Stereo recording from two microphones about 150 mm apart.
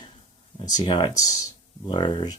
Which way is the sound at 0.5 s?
25° left (ahead or behind).